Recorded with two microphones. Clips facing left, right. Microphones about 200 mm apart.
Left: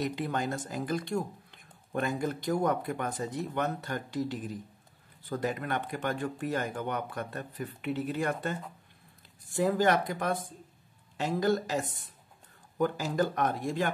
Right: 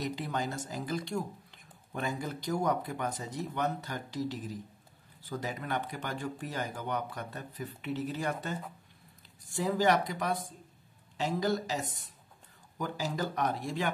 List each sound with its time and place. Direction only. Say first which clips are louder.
0.0 s speech: left 3 dB; 55° left (ahead or behind)